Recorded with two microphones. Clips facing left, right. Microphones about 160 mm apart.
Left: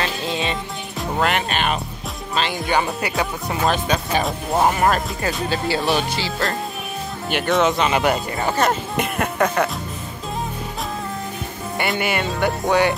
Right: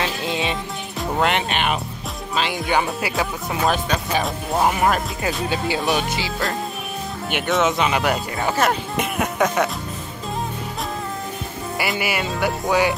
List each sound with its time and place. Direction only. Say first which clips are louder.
0.0 s music: even; 15° right (ahead or behind)
1.2 s speech: even; 20° right (ahead or behind)
2.6 s speech: even; 5° right (ahead or behind)
5.2 s speech: even; 15° right (ahead or behind)
5.8 s speech: left 1 dB; centre (ahead or behind)
11.8 s speech: left 2 dB; 5° right (ahead or behind)